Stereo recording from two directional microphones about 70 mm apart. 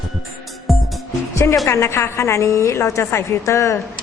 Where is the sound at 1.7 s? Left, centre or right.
Left.